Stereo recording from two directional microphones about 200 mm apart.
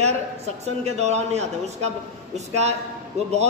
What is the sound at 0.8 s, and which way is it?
A man's voice, 35° right (ahead or behind).